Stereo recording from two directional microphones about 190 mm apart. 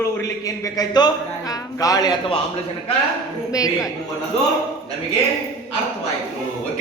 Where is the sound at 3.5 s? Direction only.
20° left (ahead or behind).